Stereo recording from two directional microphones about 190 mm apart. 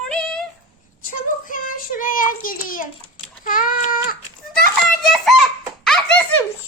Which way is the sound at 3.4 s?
45° left (ahead or behind).